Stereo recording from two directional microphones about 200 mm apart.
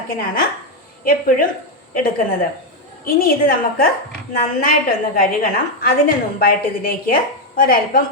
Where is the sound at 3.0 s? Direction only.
45° left (ahead or behind).